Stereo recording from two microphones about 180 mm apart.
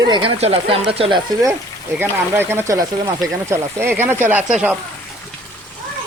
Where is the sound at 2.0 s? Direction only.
10° right (ahead or behind).